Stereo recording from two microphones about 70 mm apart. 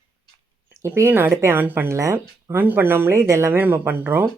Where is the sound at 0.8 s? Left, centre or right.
Right.